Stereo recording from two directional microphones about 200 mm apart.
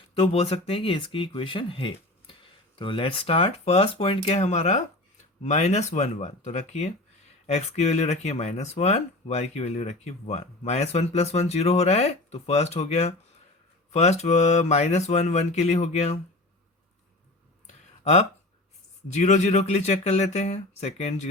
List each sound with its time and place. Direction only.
0.2 s speech: 30° left (ahead or behind)
17.7 s a sound: 35° left (ahead or behind)
19.0 s speech: 35° left (ahead or behind)